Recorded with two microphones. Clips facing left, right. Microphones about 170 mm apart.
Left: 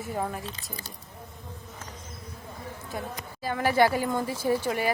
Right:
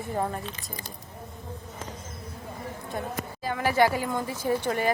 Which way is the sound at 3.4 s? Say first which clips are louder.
Left 1 dB; 15° right (ahead or behind).